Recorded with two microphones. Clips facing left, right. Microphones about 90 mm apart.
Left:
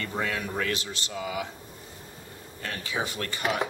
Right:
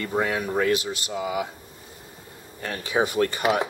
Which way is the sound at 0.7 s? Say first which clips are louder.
Right 7 dB; 10° right (ahead or behind).